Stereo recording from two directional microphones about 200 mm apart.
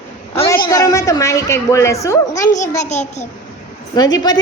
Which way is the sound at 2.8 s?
35° left (ahead or behind).